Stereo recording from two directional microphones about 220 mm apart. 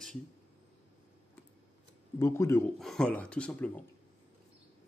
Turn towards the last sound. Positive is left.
turn(degrees=5)  # may be behind; listen again after turning